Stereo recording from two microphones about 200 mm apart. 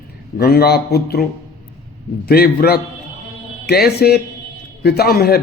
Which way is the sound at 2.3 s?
50° left (ahead or behind).